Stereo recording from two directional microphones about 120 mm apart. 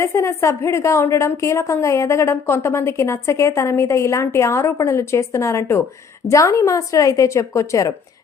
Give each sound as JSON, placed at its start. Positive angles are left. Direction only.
{"t": 0.0, "sound": "a woman's voice", "side_deg": 25}